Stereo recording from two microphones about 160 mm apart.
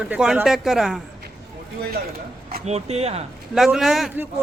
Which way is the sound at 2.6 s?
40° right (ahead or behind).